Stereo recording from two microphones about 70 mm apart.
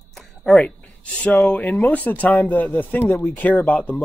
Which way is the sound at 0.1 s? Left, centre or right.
Centre.